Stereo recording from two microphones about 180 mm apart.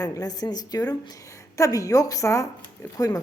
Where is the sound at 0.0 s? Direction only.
20° left (ahead or behind).